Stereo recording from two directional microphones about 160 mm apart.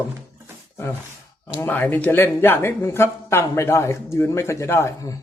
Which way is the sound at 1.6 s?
10° left (ahead or behind).